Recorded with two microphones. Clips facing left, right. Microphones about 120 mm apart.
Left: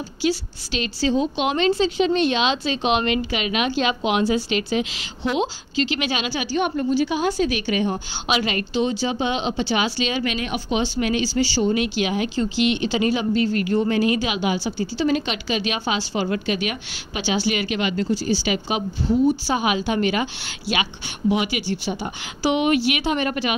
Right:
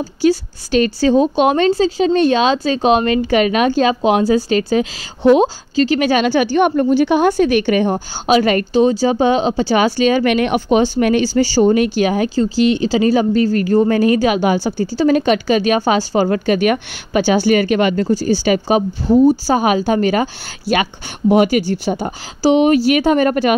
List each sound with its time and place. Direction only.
0.0 s a woman's voice: 45° right (ahead or behind)